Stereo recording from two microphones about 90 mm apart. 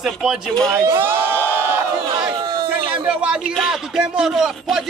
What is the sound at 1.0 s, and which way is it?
Crowd, 25° right (ahead or behind).